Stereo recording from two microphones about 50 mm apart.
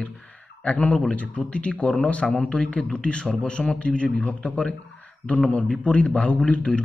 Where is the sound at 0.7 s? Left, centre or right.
Left.